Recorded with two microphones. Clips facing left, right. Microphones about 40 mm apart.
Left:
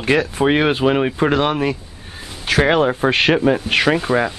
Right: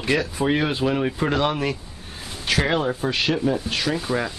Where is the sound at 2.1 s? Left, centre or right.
Centre.